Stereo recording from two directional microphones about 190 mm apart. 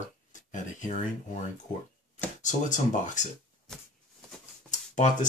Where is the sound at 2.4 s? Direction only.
40° left (ahead or behind).